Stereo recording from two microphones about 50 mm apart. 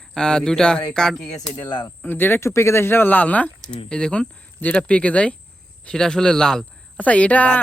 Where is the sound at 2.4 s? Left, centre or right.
Left.